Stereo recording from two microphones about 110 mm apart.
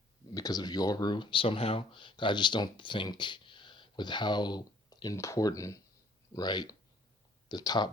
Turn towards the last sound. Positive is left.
turn(degrees=40)  # may be behind; listen again after turning